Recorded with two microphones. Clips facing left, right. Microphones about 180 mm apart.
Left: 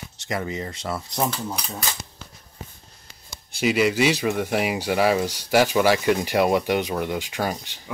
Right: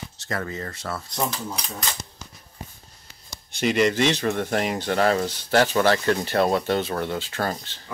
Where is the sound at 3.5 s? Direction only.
5° left (ahead or behind).